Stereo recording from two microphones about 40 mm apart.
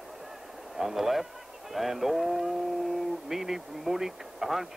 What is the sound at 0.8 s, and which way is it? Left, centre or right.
Speech, centre.